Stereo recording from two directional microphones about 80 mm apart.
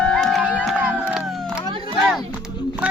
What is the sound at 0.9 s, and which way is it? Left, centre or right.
Crowd, centre.